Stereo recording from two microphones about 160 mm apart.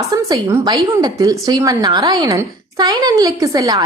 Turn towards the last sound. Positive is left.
turn(degrees=-25)  # may be behind; listen again after turning